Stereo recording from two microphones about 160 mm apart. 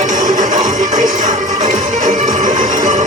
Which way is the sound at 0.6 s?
25° right (ahead or behind).